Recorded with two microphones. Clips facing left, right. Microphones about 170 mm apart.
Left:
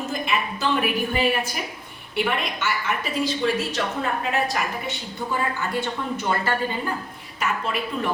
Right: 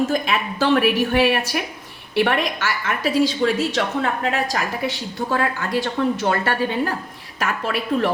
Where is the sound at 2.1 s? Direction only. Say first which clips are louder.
Right 6 dB; 85° right.